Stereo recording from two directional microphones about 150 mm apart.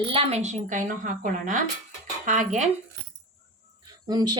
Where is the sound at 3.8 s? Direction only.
25° right (ahead or behind).